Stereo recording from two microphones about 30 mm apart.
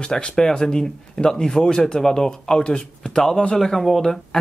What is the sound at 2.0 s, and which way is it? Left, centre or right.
Speech, centre.